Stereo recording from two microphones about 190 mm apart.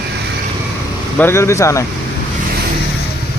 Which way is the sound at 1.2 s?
15° left (ahead or behind).